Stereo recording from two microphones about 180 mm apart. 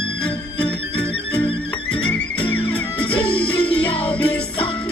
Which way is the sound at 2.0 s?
5° left (ahead or behind).